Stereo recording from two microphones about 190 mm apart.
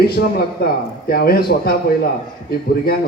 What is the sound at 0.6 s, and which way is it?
A man's voice, 55° left (ahead or behind).